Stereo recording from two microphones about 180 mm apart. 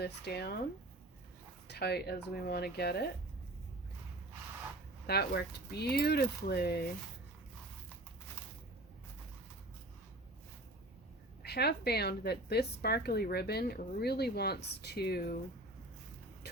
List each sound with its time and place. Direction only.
0.0 s a woman's voice: 60° left (ahead or behind)
1.6 s a woman's voice: 65° left (ahead or behind)
5.0 s a woman's voice: 65° left (ahead or behind)
11.4 s a woman's voice: 65° left (ahead or behind)